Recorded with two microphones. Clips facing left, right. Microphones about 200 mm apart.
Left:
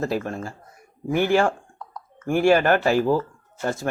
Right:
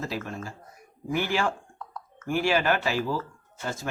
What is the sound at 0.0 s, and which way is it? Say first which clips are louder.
A man's voice: left 7 dB; 50° left (ahead or behind).